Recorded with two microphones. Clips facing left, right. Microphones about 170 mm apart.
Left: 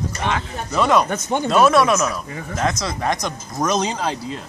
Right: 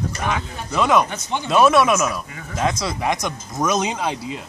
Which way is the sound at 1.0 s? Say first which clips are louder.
Left 5 dB; 45° left (ahead or behind).